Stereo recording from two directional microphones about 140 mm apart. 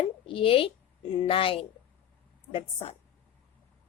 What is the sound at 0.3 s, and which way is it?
A woman's voice, 40° left (ahead or behind).